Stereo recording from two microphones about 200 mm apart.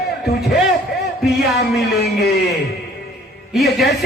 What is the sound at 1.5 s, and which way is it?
Speech, 55° left (ahead or behind).